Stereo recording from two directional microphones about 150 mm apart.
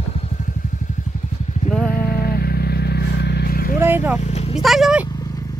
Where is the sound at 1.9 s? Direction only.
90° left.